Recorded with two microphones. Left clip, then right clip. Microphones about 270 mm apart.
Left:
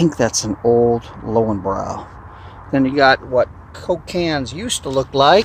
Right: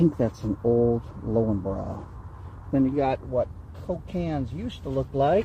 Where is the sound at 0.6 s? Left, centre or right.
Left.